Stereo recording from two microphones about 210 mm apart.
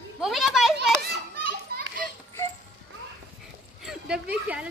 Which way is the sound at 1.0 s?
45° right (ahead or behind).